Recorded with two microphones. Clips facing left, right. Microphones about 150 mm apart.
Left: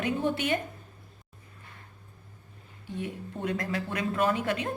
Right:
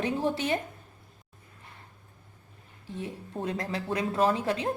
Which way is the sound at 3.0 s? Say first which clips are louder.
Even; 30° right (ahead or behind).